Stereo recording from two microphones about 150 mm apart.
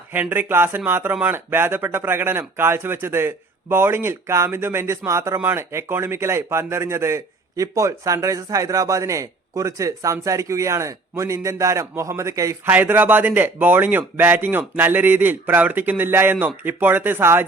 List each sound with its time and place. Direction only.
0.1 s speech: 15° right (ahead or behind)